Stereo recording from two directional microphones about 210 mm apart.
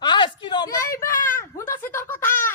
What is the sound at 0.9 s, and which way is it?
Speech, 40° left (ahead or behind).